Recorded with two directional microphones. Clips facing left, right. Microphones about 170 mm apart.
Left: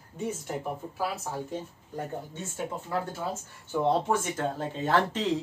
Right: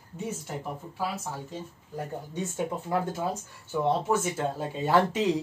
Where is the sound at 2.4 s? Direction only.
15° right (ahead or behind).